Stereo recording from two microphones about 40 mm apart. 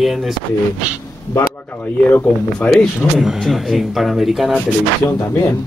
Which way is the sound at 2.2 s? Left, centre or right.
Left.